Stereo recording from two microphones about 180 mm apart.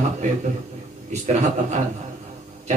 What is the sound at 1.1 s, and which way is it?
Speech, 40° right (ahead or behind).